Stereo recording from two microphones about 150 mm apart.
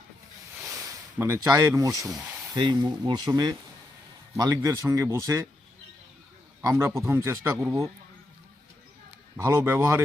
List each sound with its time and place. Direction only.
0.8 s speech: 20° right (ahead or behind)
2.1 s a sound: 10° right (ahead or behind)
2.6 s speech: 30° right (ahead or behind)
6.6 s speech: 20° right (ahead or behind)
9.4 s speech: 15° right (ahead or behind)